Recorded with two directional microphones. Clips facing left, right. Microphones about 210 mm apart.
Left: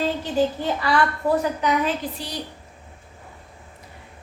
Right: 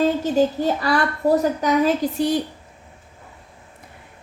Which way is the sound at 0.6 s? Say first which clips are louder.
Right 2 dB; 40° right (ahead or behind).